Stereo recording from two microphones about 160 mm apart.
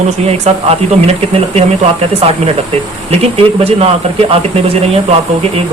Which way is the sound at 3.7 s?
40° right (ahead or behind).